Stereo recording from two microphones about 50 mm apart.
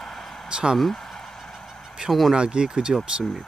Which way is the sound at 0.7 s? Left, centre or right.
Centre.